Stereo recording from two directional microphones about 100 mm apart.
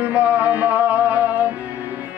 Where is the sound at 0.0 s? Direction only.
15° right (ahead or behind).